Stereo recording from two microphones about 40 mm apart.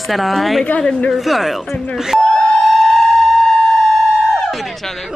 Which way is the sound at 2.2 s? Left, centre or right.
Centre.